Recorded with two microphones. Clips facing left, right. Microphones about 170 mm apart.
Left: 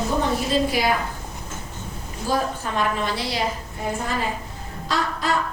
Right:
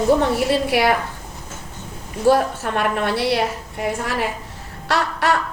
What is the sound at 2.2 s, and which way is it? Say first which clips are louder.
A woman's voice: right 8 dB; 70° right (ahead or behind).